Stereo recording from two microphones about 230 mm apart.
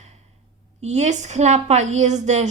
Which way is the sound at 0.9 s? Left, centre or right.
Right.